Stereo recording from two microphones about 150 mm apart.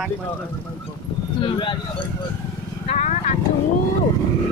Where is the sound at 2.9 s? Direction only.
50° left (ahead or behind).